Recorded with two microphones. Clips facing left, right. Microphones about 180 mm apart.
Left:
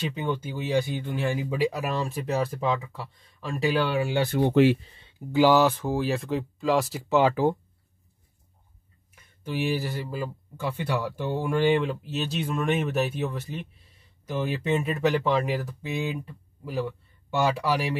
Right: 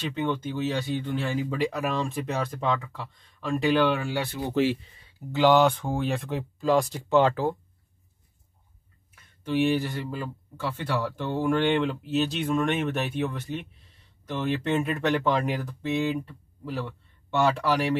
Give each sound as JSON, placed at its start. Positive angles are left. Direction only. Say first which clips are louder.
{"t": 0.0, "sound": "speech", "louder": "right 1 dB", "side_deg": 10}
{"t": 4.3, "sound": "speech", "louder": "left 6 dB", "side_deg": 60}
{"t": 5.3, "sound": "speech", "louder": "even", "side_deg": 10}
{"t": 9.4, "sound": "speech", "louder": "right 4 dB", "side_deg": 5}